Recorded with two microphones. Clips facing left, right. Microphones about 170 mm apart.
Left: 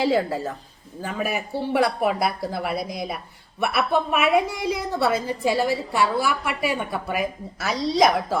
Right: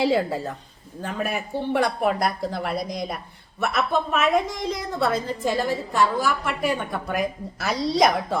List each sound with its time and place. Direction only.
0.0 s a woman's voice: centre (ahead or behind)